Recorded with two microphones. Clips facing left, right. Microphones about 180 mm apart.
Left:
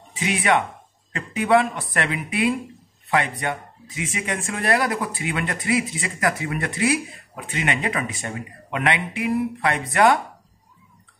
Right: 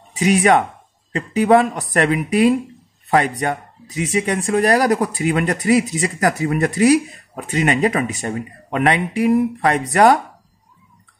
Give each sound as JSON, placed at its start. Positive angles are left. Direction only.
{"t": 0.1, "sound": "speech", "side_deg": -40}